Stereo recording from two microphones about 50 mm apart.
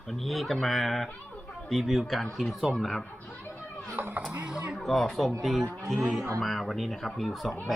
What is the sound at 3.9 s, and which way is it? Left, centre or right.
Speech, right.